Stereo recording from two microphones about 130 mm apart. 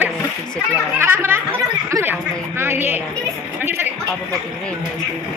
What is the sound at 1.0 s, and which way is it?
A woman's voice, 15° right (ahead or behind).